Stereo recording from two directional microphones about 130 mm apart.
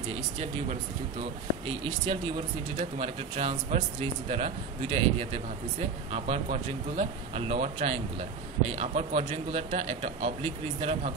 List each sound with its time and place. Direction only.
2.0 s a man's voice: 45° right (ahead or behind)